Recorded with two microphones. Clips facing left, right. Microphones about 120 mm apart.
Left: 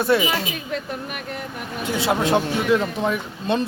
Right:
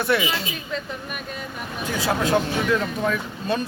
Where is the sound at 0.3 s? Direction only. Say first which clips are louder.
Left 3 dB; 55° left (ahead or behind).